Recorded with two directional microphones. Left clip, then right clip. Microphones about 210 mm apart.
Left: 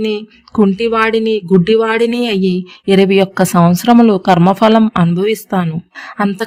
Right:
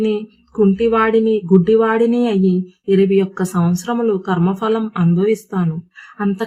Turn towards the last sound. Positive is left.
turn(degrees=40)  # may be behind; listen again after turning